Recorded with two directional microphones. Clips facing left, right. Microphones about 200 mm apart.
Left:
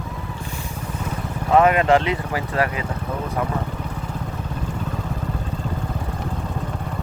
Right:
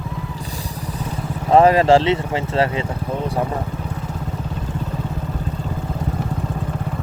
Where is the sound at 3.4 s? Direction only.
30° right (ahead or behind).